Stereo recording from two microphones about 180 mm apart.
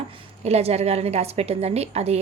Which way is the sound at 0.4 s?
35° right (ahead or behind).